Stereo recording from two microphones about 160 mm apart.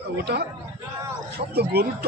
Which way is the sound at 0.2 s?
85° right.